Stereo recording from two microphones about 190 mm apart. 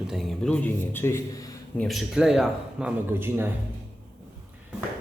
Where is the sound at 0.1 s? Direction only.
Centre (ahead or behind); by 1.5 s 15° left (ahead or behind).